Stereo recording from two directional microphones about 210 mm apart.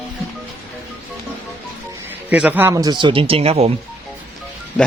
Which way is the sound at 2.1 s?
5° right (ahead or behind).